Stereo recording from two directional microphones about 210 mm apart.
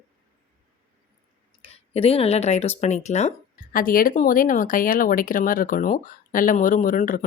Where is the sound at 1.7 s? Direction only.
30° left (ahead or behind).